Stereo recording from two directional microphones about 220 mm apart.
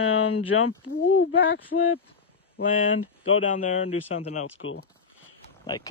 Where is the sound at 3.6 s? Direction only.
30° left (ahead or behind).